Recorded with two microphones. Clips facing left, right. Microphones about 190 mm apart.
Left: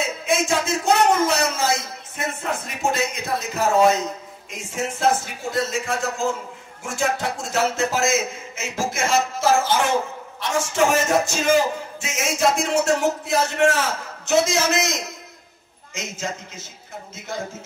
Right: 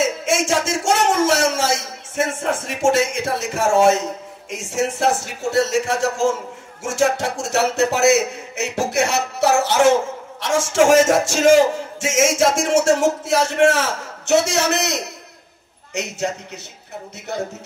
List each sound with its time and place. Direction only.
0.0 s a sound: 85° right
2.1 s a man's voice: 90° right
10.4 s a man's voice: 90° right; by 16.3 s 65° right (ahead or behind)